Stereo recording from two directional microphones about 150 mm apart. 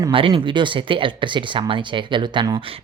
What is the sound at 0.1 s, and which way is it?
Speech, 35° right (ahead or behind).